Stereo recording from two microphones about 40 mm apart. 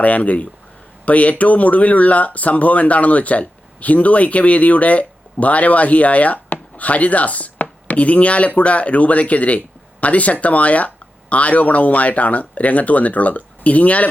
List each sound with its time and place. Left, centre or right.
0.0 s speech: left